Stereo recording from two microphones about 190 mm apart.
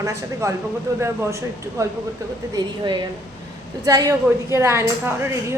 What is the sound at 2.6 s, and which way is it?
A woman's voice, 25° right (ahead or behind).